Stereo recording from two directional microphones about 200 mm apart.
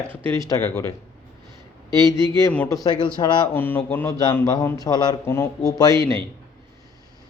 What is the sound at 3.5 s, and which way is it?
A man's voice, 10° left (ahead or behind).